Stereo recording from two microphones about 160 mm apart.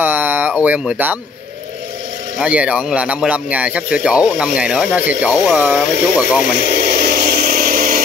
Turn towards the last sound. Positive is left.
turn(degrees=-60)  # may be behind; listen again after turning